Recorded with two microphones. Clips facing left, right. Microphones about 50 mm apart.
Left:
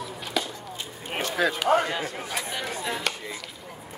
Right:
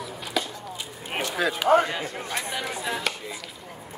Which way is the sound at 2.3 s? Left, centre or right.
Centre.